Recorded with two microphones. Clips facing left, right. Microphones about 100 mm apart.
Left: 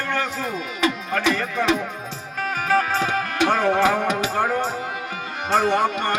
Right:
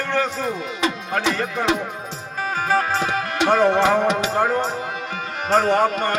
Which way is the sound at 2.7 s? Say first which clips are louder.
Left 1 dB; 25° right (ahead or behind).